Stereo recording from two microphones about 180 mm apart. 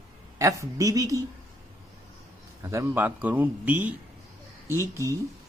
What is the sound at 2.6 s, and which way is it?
A man's voice, 15° right (ahead or behind).